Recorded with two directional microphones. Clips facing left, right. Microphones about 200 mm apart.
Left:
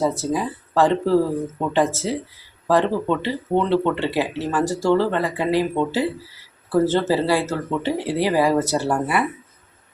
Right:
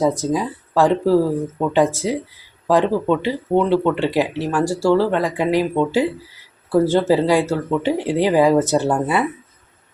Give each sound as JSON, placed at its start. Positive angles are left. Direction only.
{"t": 0.0, "sound": "speech", "side_deg": -15}